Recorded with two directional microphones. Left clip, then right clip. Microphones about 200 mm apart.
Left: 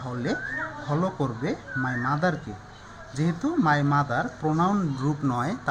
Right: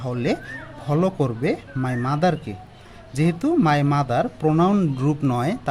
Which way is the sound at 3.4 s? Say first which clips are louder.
Right 3 dB; 70° right (ahead or behind).